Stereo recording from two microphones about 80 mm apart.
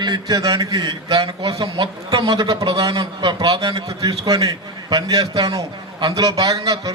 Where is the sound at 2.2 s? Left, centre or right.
Right.